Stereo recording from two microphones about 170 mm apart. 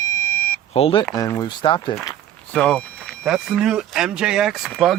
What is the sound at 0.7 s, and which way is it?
Speech, 35° left (ahead or behind).